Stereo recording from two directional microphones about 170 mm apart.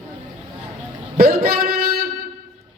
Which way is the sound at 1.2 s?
65° right (ahead or behind).